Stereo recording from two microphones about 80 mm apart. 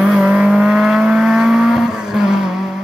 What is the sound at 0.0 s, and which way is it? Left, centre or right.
Vehicle, centre.